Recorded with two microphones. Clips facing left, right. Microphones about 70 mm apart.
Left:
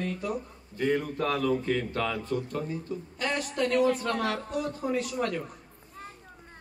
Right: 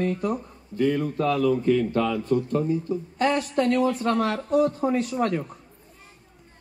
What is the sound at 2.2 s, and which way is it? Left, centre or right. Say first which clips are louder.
A woman's voice: right 8 dB; right.